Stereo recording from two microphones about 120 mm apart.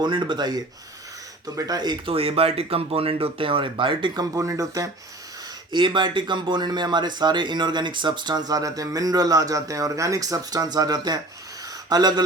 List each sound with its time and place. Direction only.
0.0 s speech: 40° right (ahead or behind)
2.1 s speech: 55° right (ahead or behind); by 4.9 s 30° right (ahead or behind)
5.7 s speech: 40° right (ahead or behind)